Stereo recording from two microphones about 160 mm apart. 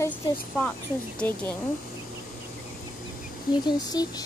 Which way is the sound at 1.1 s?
10° left (ahead or behind).